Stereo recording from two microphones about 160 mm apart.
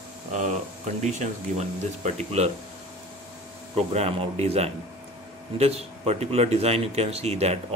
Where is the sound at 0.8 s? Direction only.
45° right (ahead or behind).